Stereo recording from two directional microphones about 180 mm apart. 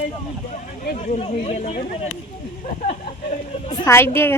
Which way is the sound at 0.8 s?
40° left (ahead or behind).